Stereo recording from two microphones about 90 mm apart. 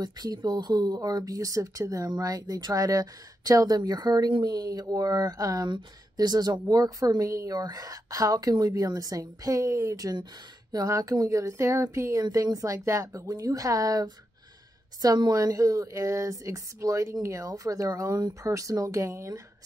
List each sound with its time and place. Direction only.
0.0 s speech: 45° right (ahead or behind)